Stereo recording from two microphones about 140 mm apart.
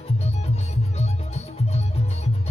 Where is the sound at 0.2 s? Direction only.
55° left (ahead or behind).